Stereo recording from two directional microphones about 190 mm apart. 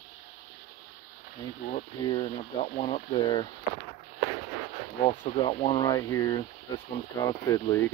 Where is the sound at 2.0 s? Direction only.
25° left (ahead or behind).